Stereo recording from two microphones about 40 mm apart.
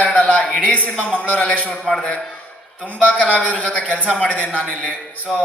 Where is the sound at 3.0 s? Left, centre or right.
Left.